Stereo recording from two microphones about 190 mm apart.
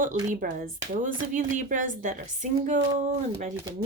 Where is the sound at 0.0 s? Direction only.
45° right (ahead or behind).